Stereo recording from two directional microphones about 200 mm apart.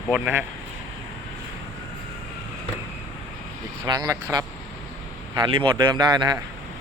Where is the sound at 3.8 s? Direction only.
20° right (ahead or behind).